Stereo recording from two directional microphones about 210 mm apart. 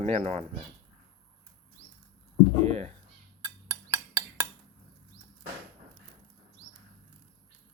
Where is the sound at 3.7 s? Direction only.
15° right (ahead or behind).